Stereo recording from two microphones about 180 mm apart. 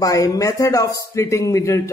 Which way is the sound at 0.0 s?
20° left (ahead or behind).